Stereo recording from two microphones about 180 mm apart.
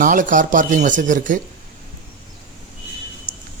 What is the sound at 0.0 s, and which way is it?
Speech, 45° right (ahead or behind).